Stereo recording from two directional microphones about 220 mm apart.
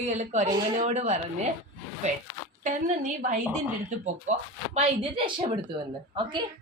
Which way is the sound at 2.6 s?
35° right (ahead or behind).